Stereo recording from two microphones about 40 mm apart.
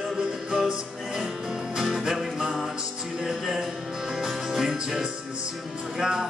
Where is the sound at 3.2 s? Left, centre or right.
Centre.